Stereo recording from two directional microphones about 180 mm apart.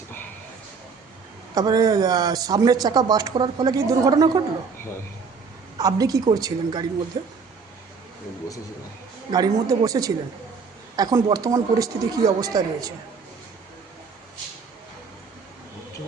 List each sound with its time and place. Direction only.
1.5 s speech: 20° right (ahead or behind)
5.7 s speech: 20° right (ahead or behind)
9.3 s speech: 20° right (ahead or behind)